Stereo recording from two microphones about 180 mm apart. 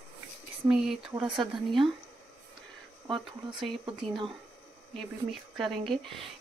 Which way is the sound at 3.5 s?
Centre (ahead or behind).